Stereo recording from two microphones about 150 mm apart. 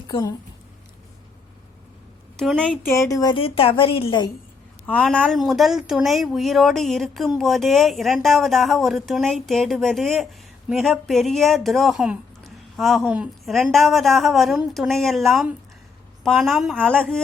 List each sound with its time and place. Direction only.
0.1 s a woman's voice: 25° left (ahead or behind)
2.3 s speech: 5° left (ahead or behind)
3.1 s a woman's voice: 25° left (ahead or behind)
3.3 s a woman's voice: 40° left (ahead or behind)
4.9 s speech: 10° left (ahead or behind)